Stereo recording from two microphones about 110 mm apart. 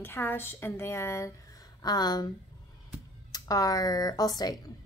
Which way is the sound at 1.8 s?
40° left (ahead or behind).